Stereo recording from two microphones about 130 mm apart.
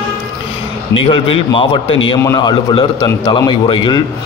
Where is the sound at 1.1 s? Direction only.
40° left (ahead or behind).